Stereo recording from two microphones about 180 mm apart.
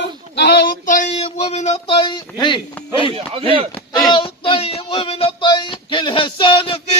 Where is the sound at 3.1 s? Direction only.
30° right (ahead or behind).